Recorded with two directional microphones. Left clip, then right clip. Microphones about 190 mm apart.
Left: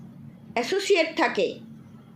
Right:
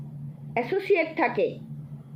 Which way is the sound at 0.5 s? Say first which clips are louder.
Left 1 dB; 25° left (ahead or behind).